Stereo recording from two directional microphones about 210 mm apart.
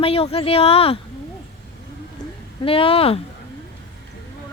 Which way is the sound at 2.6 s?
25° left (ahead or behind).